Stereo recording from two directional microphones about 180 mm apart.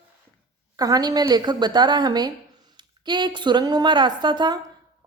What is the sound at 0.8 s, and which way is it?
A woman's voice, 20° right (ahead or behind).